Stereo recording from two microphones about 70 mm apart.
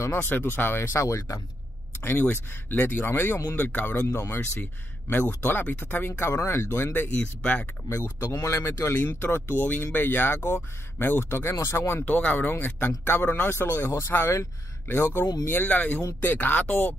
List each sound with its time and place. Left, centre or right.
0.0 s speech: left
2.0 s speech: left
7.9 s speech: left
12.0 s speech: left